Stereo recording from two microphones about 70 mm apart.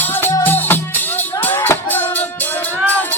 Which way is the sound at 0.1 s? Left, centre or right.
Left.